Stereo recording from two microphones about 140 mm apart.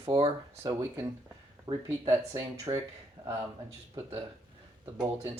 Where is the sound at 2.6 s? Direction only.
20° right (ahead or behind).